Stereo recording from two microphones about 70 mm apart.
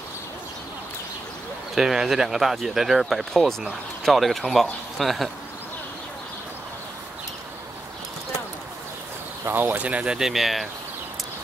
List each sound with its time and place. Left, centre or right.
1.8 s speech: centre
9.5 s speech: right
10.1 s speech: centre